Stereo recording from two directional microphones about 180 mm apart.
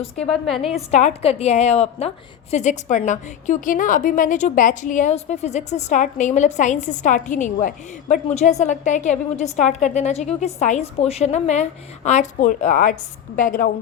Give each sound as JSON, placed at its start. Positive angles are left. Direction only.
{"t": 0.2, "sound": "a woman's voice", "side_deg": 0}
{"t": 0.9, "sound": "a woman's voice", "side_deg": 40}